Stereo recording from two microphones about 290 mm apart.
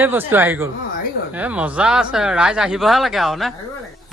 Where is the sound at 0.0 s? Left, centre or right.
Centre.